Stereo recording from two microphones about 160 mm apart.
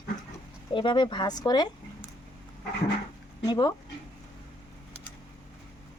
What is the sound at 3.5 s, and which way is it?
Speech, 25° left (ahead or behind).